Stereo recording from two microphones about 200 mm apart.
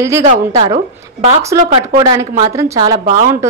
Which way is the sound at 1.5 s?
15° right (ahead or behind).